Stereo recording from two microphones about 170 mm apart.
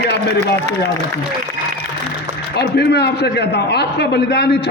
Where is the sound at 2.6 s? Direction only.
75° left (ahead or behind).